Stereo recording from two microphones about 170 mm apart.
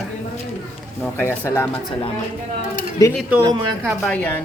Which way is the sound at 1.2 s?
15° left (ahead or behind).